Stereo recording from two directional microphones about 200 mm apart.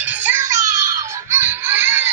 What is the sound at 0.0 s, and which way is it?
Music, 10° right (ahead or behind).